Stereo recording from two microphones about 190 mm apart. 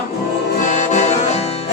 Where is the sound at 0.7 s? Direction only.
40° left (ahead or behind).